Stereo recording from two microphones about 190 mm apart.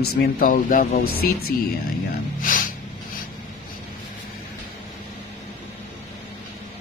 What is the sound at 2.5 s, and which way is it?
Music, 45° left (ahead or behind).